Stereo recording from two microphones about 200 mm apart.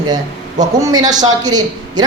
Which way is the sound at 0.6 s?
20° right (ahead or behind).